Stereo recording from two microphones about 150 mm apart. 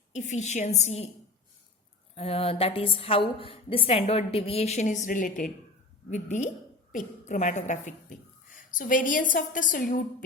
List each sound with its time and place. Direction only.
0.1 s a woman's voice: 50° left (ahead or behind)
2.1 s a woman's voice: 40° left (ahead or behind); by 5.5 s 65° left (ahead or behind)
6.1 s a woman's voice: 55° left (ahead or behind)